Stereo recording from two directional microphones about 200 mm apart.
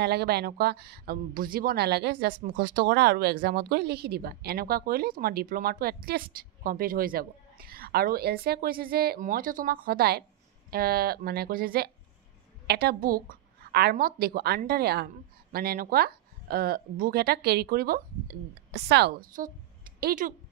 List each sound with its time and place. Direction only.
0.0 s a woman's voice: 55° right (ahead or behind)